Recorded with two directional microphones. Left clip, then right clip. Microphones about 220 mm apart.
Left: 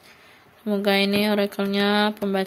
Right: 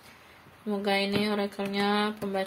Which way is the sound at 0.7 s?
55° left (ahead or behind).